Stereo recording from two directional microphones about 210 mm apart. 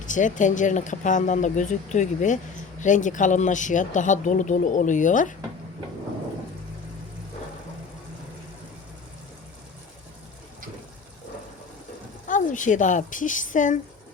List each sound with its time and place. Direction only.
0.0 s speech: 35° left (ahead or behind)
12.3 s speech: 35° left (ahead or behind)